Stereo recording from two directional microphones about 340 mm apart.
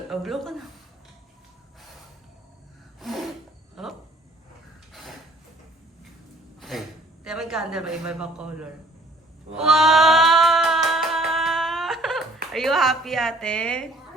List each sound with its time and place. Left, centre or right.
0.1 s a woman's voice: centre
3.0 s snort: centre
3.8 s a sound: centre
6.6 s a sound: centre
7.3 s a man's voice: centre
9.6 s music: centre
12.5 s a woman's voice: centre